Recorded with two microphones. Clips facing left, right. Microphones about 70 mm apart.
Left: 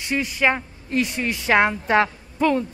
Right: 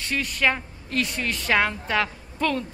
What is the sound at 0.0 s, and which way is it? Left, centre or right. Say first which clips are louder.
A woman's voice: left 3 dB; centre.